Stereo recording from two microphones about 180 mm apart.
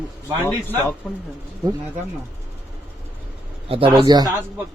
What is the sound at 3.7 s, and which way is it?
Speech, 30° right (ahead or behind).